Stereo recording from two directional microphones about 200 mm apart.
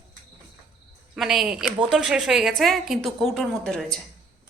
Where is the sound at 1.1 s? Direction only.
Centre (ahead or behind).